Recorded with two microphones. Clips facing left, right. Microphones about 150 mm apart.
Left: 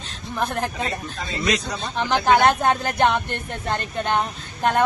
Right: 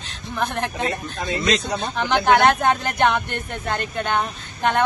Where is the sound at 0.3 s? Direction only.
5° left (ahead or behind).